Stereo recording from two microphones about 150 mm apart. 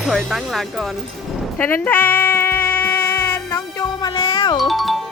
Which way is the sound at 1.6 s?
15° left (ahead or behind).